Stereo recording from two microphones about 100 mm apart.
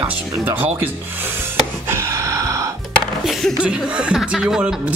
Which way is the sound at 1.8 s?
25° right (ahead or behind).